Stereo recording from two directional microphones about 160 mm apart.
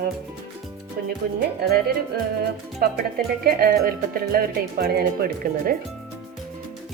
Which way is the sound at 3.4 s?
70° right (ahead or behind).